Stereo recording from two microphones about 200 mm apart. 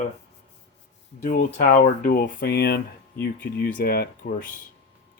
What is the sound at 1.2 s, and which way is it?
Speech, 40° left (ahead or behind).